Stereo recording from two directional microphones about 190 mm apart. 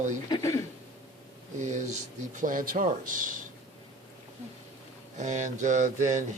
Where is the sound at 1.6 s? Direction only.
40° right (ahead or behind).